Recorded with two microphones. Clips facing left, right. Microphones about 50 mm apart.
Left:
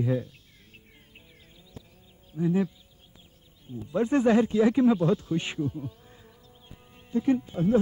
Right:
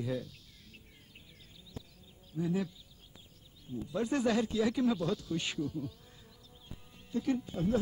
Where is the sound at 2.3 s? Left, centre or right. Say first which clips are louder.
Left 8 dB; left.